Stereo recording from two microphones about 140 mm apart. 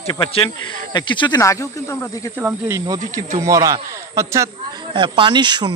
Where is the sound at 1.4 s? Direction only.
20° left (ahead or behind).